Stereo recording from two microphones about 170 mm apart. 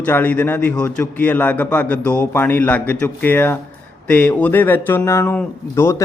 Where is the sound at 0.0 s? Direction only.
10° left (ahead or behind).